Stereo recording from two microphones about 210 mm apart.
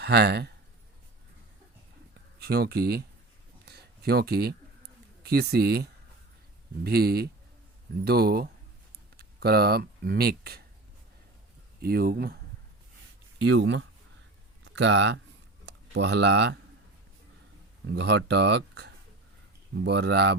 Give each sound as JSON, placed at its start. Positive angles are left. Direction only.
{"t": 0.0, "sound": "speech", "side_deg": -50}
{"t": 2.4, "sound": "speech", "side_deg": -50}
{"t": 3.7, "sound": "a sound", "side_deg": -50}
{"t": 5.2, "sound": "speech", "side_deg": -50}
{"t": 11.8, "sound": "speech", "side_deg": -45}
{"t": 13.4, "sound": "speech", "side_deg": -60}
{"t": 17.8, "sound": "speech", "side_deg": -55}